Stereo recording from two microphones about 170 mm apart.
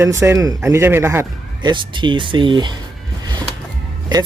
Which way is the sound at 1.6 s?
30° right (ahead or behind).